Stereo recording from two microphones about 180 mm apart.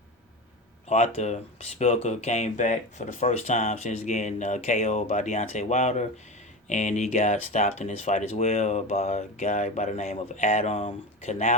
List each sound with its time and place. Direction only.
0.9 s speech: 35° left (ahead or behind)